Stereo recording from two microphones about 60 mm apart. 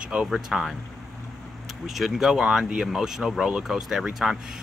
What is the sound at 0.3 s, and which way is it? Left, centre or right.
Speech, centre.